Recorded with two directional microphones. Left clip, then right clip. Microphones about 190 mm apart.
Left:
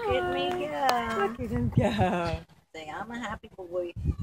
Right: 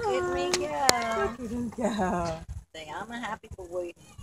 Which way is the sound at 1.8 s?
30° left (ahead or behind).